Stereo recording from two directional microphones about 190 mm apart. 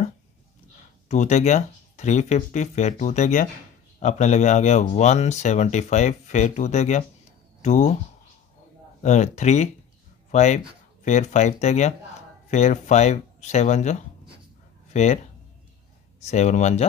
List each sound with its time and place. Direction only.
1.0 s speech: 40° left (ahead or behind)
9.0 s speech: 40° left (ahead or behind)
16.2 s speech: 35° left (ahead or behind)